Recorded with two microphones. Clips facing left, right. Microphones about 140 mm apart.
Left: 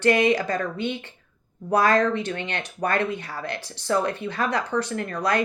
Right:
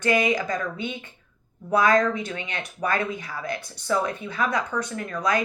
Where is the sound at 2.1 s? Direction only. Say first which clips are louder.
Left 3 dB; 65° left (ahead or behind).